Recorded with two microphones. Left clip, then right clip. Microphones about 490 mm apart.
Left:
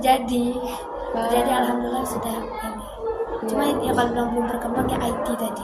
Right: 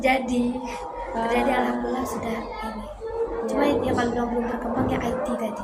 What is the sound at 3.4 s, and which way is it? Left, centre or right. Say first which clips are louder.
Speech: left 1 dB; left.